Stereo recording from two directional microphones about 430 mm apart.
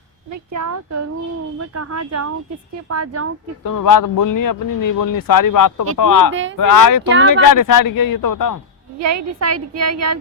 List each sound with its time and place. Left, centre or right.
0.5 s a woman's voice: right
3.6 s speech: left
7.1 s speech: right
7.4 s speech: left
9.0 s a woman's voice: right